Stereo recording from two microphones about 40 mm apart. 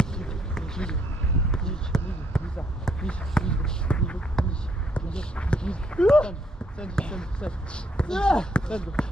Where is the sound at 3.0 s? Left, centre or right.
Left.